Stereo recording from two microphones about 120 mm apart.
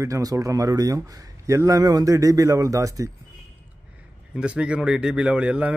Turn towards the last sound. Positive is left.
turn(degrees=-10)  # may be behind; listen again after turning